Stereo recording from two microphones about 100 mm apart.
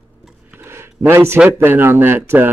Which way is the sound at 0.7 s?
25° right (ahead or behind).